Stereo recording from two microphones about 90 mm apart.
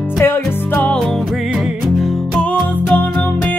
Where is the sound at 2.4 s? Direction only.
15° left (ahead or behind).